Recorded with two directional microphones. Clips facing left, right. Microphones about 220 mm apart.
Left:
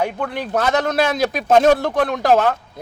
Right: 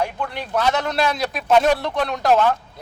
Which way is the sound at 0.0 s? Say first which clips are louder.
Left 3 dB; 50° left (ahead or behind).